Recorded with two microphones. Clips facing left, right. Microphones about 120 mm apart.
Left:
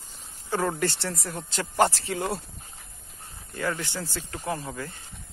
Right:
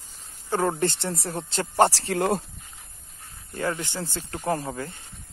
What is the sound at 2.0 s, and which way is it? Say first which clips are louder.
Speech: right 5 dB; 50° right (ahead or behind).